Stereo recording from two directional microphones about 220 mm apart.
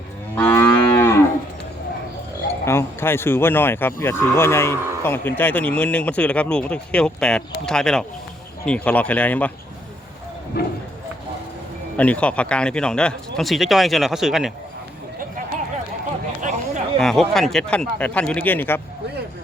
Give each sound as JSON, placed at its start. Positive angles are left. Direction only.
{"t": 0.3, "sound": "moo", "side_deg": 10}
{"t": 2.6, "sound": "speech", "side_deg": 10}
{"t": 10.5, "sound": "speech", "side_deg": 45}
{"t": 11.9, "sound": "speech", "side_deg": 5}
{"t": 16.4, "sound": "a sound", "side_deg": -35}
{"t": 17.0, "sound": "speech", "side_deg": 0}